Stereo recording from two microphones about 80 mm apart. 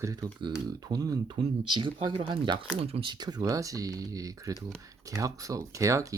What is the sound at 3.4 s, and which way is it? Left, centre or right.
Speech, right.